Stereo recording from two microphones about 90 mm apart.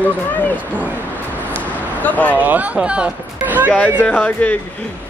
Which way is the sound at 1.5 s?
15° left (ahead or behind).